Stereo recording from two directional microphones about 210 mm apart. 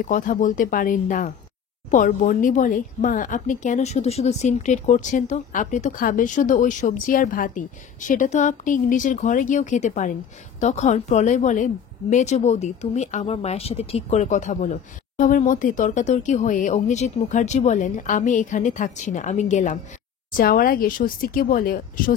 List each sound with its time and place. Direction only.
0.0 s a woman's voice: 40° left (ahead or behind)